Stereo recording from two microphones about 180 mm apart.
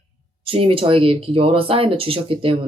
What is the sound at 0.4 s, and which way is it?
Speech, 30° right (ahead or behind).